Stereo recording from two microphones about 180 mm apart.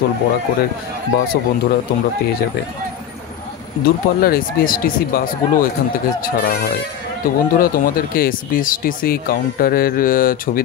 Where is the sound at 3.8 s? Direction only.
55° left (ahead or behind).